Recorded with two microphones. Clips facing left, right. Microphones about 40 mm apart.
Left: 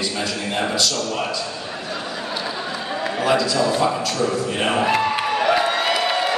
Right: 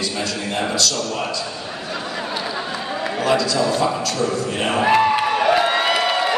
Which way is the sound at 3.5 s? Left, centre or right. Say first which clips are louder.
Even; centre.